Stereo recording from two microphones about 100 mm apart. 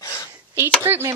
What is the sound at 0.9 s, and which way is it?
Speech, 25° right (ahead or behind).